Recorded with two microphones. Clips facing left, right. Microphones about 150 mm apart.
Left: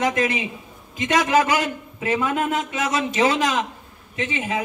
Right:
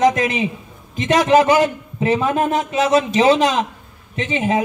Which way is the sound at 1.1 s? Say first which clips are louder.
Right 6 dB; 30° right (ahead or behind).